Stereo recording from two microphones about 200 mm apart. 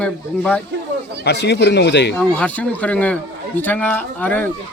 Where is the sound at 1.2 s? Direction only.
60° left (ahead or behind).